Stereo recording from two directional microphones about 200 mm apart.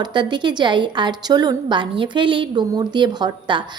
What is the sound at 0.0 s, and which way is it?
A woman's voice, 20° right (ahead or behind).